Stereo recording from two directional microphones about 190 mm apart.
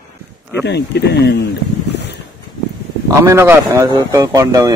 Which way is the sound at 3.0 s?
15° right (ahead or behind).